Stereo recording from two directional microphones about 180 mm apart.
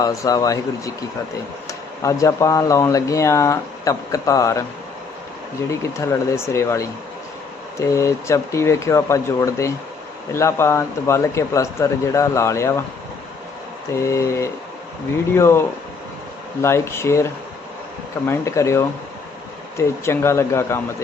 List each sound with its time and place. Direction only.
0.0 s speech: 20° left (ahead or behind)
6.0 s speech: 15° left (ahead or behind)
14.0 s speech: 15° left (ahead or behind)
18.3 s speech: 15° left (ahead or behind)